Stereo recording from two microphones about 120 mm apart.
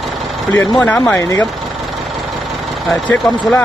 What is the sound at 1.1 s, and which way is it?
Speech, 25° left (ahead or behind).